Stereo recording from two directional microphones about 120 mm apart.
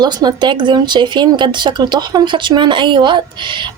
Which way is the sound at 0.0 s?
35° right (ahead or behind).